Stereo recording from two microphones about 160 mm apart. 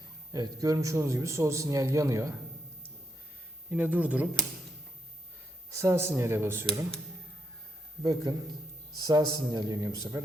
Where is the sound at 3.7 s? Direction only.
10° right (ahead or behind).